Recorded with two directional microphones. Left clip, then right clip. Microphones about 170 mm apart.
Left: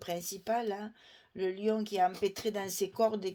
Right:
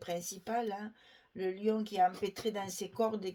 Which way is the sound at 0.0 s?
45° left (ahead or behind).